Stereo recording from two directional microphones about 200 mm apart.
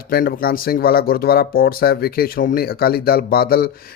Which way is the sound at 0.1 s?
50° left (ahead or behind).